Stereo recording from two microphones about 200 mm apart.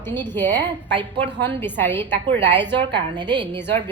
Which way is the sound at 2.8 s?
20° right (ahead or behind).